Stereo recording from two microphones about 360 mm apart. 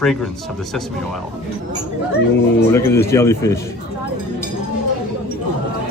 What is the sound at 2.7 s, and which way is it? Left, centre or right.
Speech, centre.